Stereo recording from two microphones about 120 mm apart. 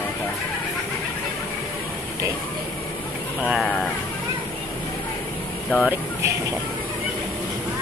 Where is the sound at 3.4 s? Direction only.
Centre (ahead or behind).